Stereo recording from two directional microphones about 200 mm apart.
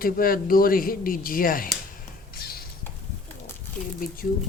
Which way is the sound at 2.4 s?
50° left (ahead or behind).